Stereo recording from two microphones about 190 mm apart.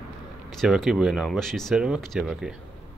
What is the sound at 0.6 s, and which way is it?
Speech, centre (ahead or behind).